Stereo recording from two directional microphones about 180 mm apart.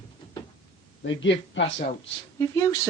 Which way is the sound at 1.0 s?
90° left.